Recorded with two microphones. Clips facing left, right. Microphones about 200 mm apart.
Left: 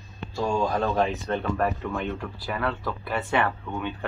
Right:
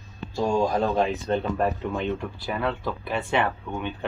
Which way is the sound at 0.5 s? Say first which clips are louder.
Right 2 dB; 15° right (ahead or behind).